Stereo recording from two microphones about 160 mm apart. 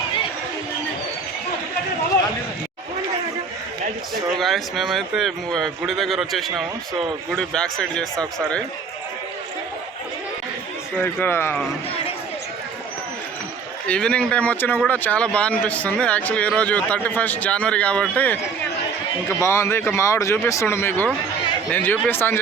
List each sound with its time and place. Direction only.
4.4 s a man's voice: centre (ahead or behind)
11.0 s speech: 15° left (ahead or behind)
13.8 s speech: 5° left (ahead or behind)